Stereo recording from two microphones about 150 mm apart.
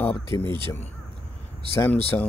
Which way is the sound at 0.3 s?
15° left (ahead or behind).